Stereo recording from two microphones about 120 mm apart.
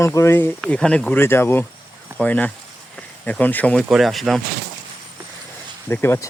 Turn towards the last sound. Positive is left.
turn(degrees=20)  # may be behind; listen again after turning